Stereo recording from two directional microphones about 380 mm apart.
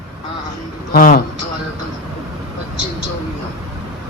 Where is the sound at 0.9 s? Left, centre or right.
Left.